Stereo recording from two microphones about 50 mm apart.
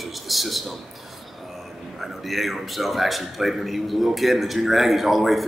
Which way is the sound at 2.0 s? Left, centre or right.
Centre.